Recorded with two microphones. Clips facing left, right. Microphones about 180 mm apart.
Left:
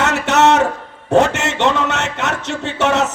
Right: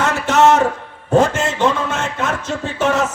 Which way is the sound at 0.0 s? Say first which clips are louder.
Even; 70° left (ahead or behind).